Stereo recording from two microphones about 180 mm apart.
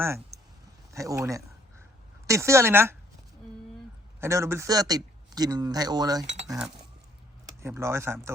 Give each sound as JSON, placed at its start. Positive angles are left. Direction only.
{"t": 0.9, "sound": "speech", "side_deg": -15}
{"t": 4.2, "sound": "speech", "side_deg": -15}
{"t": 7.4, "sound": "speech", "side_deg": -15}